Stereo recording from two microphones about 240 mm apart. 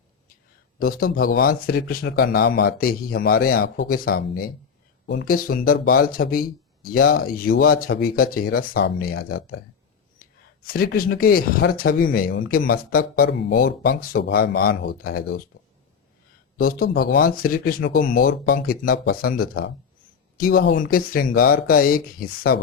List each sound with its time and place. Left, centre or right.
0.8 s speech: left
16.6 s speech: left